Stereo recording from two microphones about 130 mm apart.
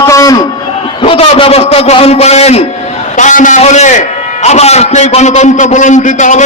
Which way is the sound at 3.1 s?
80° left.